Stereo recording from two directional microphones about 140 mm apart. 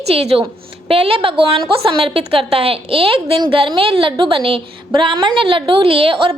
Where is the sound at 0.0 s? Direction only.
45° right (ahead or behind).